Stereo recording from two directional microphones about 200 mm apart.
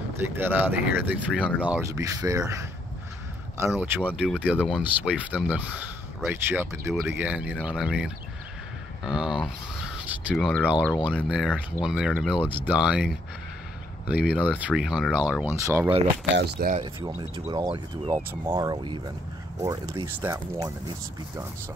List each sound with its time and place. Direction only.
0.2 s speech: 10° right (ahead or behind)
3.7 s speech: 10° right (ahead or behind)
16.3 s speech: 50° right (ahead or behind)
16.8 s speech: 20° right (ahead or behind)